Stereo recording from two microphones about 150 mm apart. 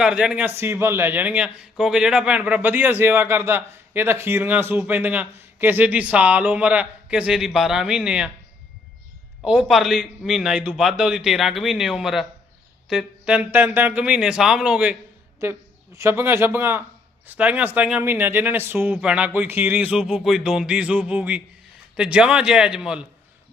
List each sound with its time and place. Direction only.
0.0 s a man's voice: 5° right (ahead or behind)
9.4 s a man's voice: 5° right (ahead or behind)
15.4 s a man's voice: 20° right (ahead or behind)